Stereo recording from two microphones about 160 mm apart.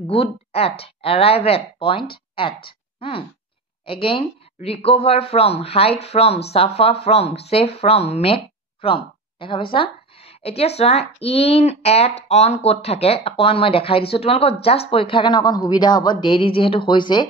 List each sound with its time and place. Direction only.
0.1 s a woman's voice: 40° left (ahead or behind)